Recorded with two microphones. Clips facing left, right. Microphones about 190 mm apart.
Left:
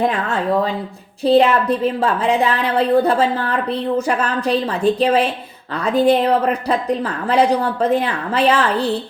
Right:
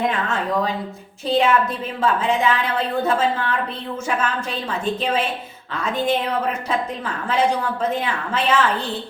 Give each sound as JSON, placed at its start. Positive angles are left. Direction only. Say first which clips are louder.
{"t": 1.2, "sound": "a woman's voice", "louder": "left 5 dB", "side_deg": 35}
{"t": 7.3, "sound": "a woman's voice", "louder": "left 5 dB", "side_deg": 35}